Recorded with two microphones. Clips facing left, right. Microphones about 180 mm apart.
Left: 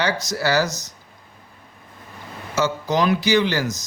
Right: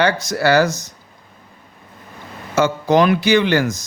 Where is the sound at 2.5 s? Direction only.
55° right (ahead or behind).